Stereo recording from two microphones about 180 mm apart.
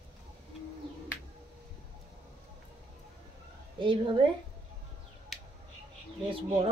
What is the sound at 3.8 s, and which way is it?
Speech, 30° right (ahead or behind).